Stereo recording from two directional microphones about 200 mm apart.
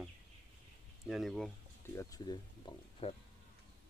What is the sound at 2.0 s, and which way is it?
Speech, 20° left (ahead or behind).